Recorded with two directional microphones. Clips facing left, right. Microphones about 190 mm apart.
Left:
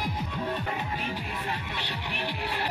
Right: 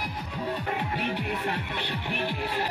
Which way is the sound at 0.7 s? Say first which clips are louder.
Right 3 dB; 60° right (ahead or behind).